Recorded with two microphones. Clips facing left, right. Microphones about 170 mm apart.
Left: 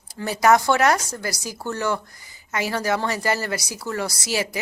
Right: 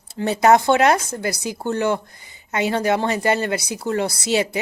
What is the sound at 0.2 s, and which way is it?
Speech, 25° right (ahead or behind).